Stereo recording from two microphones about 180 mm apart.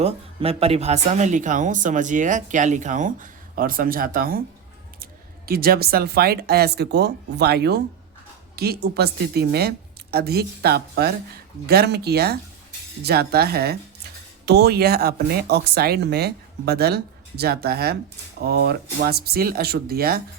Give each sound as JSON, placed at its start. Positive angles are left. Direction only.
{"t": 0.0, "sound": "speech", "side_deg": -35}
{"t": 5.5, "sound": "speech", "side_deg": -60}